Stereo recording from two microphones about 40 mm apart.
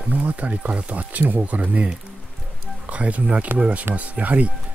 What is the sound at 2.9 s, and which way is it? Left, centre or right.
Speech, right.